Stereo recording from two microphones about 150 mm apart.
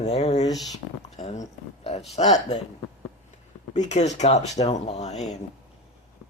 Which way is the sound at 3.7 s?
50° left (ahead or behind).